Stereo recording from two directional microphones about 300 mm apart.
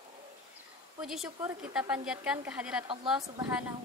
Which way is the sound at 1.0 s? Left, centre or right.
Centre.